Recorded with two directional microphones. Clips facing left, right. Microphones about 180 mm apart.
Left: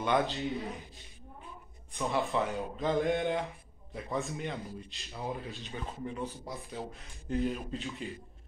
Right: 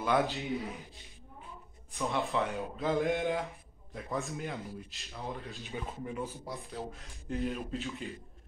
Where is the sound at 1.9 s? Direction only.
Centre (ahead or behind).